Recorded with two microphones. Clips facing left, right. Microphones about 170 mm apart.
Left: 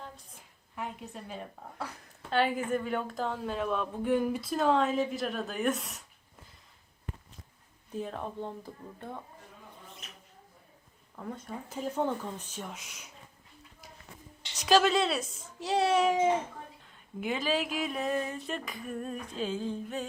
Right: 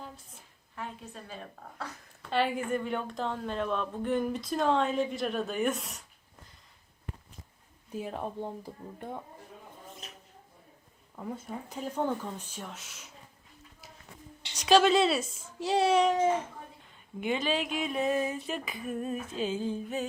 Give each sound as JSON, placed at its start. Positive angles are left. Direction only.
{"t": 0.8, "sound": "a woman's voice", "side_deg": 15}
{"t": 2.3, "sound": "a woman's voice", "side_deg": 0}
{"t": 7.9, "sound": "speech", "side_deg": -10}
{"t": 11.2, "sound": "a woman's voice", "side_deg": -5}
{"t": 12.0, "sound": "a woman's voice", "side_deg": -5}
{"t": 12.5, "sound": "a woman's voice", "side_deg": 5}
{"t": 14.5, "sound": "a woman's voice", "side_deg": 0}